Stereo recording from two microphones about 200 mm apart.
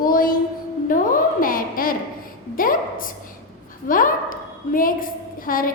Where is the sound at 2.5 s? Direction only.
45° left (ahead or behind).